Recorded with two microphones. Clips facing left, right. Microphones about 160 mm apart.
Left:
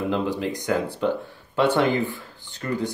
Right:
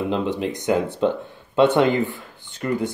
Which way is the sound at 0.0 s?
20° right (ahead or behind).